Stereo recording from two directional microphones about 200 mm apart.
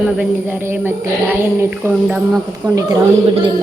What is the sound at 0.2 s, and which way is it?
Speech, 10° right (ahead or behind).